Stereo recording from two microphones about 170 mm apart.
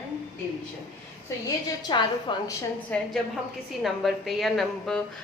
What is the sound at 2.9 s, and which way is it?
A woman's voice, 10° left (ahead or behind).